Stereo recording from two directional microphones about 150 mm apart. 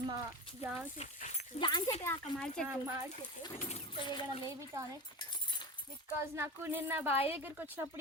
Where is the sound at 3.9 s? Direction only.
35° left (ahead or behind).